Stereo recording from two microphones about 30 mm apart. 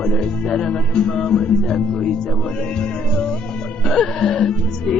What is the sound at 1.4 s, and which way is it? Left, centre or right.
Music, left.